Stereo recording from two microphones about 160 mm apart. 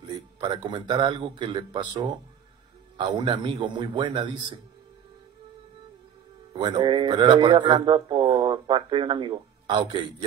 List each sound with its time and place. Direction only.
0.0 s a man's voice: 30° right (ahead or behind)
6.5 s a man's voice: 30° right (ahead or behind)